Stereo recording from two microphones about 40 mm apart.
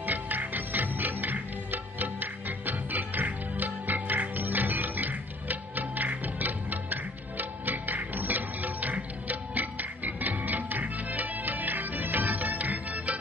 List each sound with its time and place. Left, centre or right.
0.0 s music: right